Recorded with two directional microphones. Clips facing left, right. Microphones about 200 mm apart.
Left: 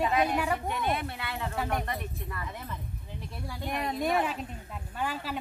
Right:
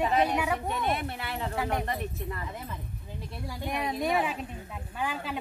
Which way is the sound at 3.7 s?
5° right (ahead or behind).